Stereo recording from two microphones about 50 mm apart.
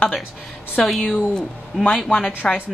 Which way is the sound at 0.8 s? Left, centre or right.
Centre.